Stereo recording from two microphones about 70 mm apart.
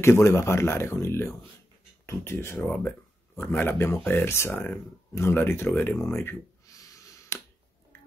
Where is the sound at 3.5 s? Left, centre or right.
Left.